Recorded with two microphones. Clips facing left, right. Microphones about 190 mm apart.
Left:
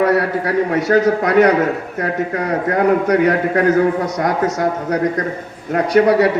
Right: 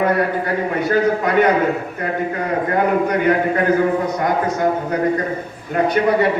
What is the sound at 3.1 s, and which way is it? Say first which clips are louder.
A man's voice: left 2 dB; 75° left (ahead or behind).